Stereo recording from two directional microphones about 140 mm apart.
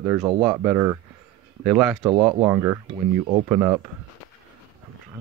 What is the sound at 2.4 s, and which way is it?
Speech, 20° right (ahead or behind).